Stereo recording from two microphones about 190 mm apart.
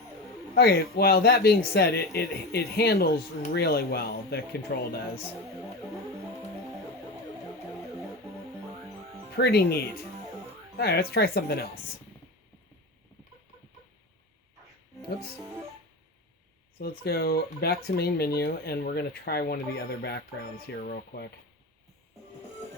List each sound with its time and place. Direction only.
0.5 s speech: 60° left (ahead or behind)
9.3 s speech: 55° left (ahead or behind)
16.7 s speech: 55° left (ahead or behind)